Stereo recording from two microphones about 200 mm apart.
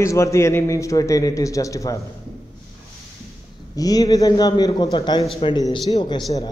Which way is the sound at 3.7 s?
20° left (ahead or behind).